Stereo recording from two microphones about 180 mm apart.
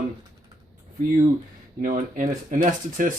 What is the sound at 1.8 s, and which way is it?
Speech, 45° right (ahead or behind).